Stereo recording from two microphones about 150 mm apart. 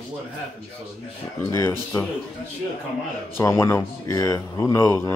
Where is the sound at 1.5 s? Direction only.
20° left (ahead or behind).